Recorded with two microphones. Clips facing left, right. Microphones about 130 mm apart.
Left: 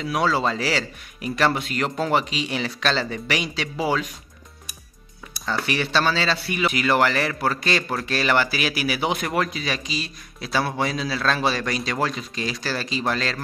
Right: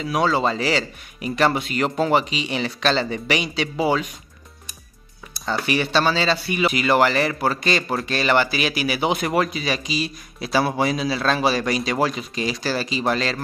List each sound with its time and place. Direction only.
0.0 s a man's voice: centre (ahead or behind)
5.4 s a man's voice: 5° right (ahead or behind)